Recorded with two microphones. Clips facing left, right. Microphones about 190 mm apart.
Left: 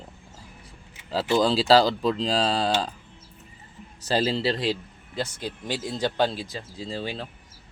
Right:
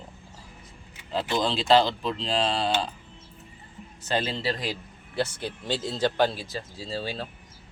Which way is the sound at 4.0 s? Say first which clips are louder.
Left 4 dB; 35° left (ahead or behind).